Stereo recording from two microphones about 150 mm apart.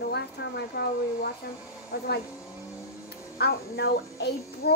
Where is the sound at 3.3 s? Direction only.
90° left.